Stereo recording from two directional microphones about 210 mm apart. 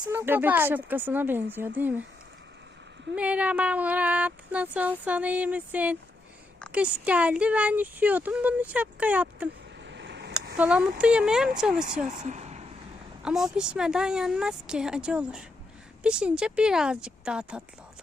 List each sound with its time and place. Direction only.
0.0 s speech: 10° right (ahead or behind)
3.2 s speech: 5° right (ahead or behind)
9.8 s a sound: 55° right (ahead or behind)
10.6 s speech: 5° right (ahead or behind)
12.0 s speech: 35° right (ahead or behind)
13.2 s speech: 5° right (ahead or behind)